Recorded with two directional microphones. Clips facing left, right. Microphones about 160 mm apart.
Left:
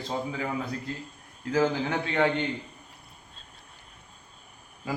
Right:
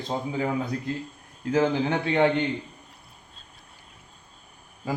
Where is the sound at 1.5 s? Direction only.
20° right (ahead or behind).